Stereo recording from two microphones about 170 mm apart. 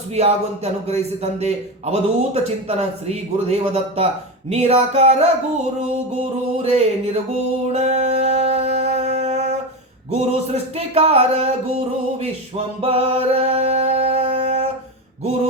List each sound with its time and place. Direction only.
0.1 s a man's voice: 40° right (ahead or behind)
6.6 s a man's voice: 40° right (ahead or behind)
7.7 s music: 40° right (ahead or behind)
10.2 s a man's voice: 40° right (ahead or behind)
12.2 s music: 35° right (ahead or behind)